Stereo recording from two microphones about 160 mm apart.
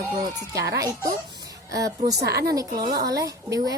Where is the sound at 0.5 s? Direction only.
90° right.